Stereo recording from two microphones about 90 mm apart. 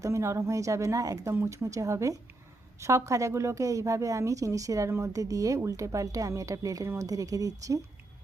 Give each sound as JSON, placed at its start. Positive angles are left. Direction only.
{"t": 0.0, "sound": "a woman's voice", "side_deg": -30}